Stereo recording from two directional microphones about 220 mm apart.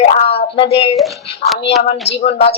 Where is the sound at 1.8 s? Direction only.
45° left (ahead or behind).